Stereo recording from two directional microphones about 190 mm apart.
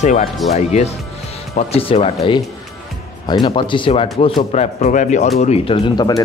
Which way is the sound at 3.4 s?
25° left (ahead or behind).